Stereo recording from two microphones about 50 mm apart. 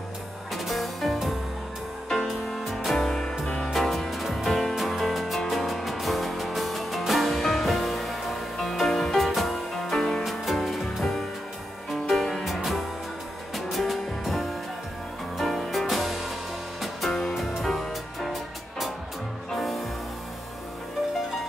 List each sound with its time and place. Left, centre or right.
0.5 s music: centre
3.7 s music: centre
19.5 s music: centre